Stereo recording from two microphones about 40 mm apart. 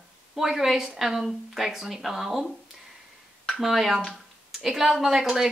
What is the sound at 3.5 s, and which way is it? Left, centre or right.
Speech, centre.